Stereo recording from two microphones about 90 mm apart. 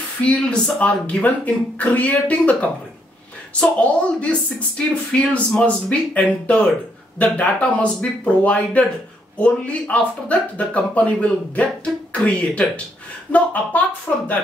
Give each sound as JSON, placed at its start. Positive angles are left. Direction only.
{"t": 0.2, "sound": "speech", "side_deg": 15}